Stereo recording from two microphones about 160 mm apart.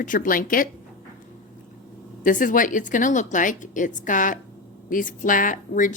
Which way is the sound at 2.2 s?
55° left (ahead or behind).